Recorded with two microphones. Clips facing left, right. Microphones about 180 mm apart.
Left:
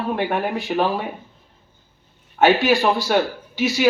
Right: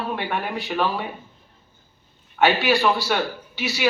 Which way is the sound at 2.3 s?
45° left (ahead or behind).